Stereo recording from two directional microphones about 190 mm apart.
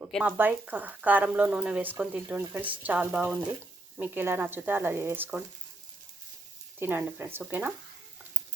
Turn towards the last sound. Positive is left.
turn(degrees=-10)  # may be behind; listen again after turning